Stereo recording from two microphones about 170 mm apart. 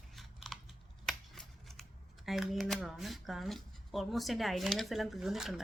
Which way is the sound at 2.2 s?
Centre (ahead or behind).